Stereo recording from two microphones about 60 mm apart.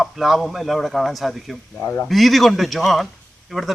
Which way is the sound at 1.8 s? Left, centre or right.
Left.